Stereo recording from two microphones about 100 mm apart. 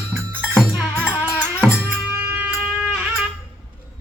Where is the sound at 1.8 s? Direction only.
20° right (ahead or behind).